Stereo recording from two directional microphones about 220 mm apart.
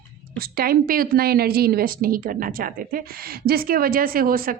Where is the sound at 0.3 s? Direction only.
40° right (ahead or behind).